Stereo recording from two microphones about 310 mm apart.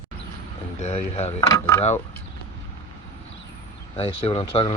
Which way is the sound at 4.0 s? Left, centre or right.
Centre.